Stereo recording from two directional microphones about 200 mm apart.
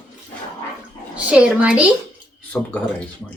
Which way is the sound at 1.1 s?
5° right (ahead or behind).